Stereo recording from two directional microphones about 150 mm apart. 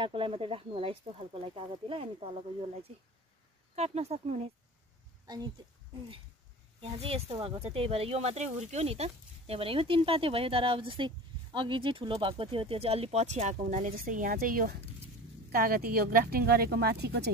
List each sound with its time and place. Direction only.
0.0 s speech: 35° right (ahead or behind)
3.7 s speech: 45° right (ahead or behind)
5.2 s a woman's voice: 25° right (ahead or behind)
6.8 s speech: 40° right (ahead or behind); by 17.3 s 90° right